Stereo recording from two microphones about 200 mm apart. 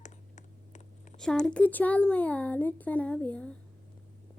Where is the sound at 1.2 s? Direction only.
5° left (ahead or behind).